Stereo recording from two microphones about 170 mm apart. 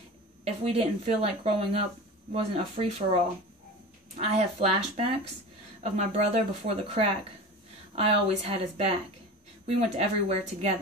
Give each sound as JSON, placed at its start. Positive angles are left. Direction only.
{"t": 0.5, "sound": "speech", "side_deg": -35}